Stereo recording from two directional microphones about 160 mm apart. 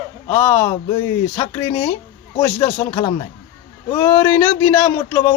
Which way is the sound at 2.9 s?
30° left (ahead or behind).